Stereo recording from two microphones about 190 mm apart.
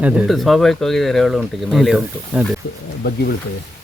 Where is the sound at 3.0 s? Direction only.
55° left (ahead or behind).